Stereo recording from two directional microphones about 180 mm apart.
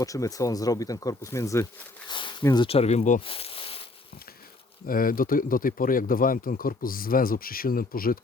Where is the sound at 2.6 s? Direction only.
35° left (ahead or behind).